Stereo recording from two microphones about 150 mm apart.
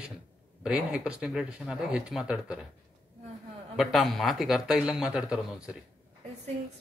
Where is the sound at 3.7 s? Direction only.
Centre (ahead or behind).